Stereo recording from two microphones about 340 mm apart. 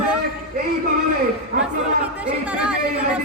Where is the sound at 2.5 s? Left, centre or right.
Centre.